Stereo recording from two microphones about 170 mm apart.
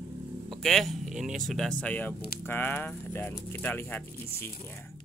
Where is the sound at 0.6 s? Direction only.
Centre (ahead or behind).